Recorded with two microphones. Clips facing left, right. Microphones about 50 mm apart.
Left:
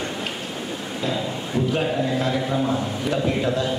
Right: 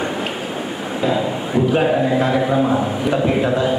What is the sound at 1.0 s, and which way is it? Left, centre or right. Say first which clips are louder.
A man's voice: right 7 dB; right.